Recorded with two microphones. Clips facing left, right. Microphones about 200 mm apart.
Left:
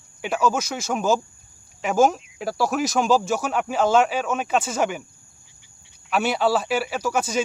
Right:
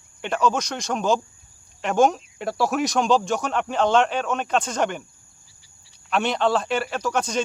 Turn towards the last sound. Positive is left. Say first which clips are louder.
# left 1 dB
turn(degrees=5)  # may be behind; listen again after turning